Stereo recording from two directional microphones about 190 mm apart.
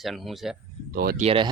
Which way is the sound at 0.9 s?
55° right (ahead or behind).